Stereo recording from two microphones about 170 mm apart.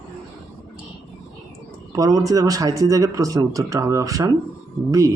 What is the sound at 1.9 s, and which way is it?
Speech, 20° right (ahead or behind).